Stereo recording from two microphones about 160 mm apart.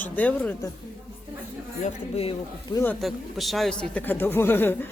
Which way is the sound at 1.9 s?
40° left (ahead or behind).